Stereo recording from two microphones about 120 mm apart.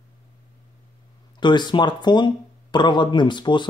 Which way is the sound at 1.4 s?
40° left (ahead or behind).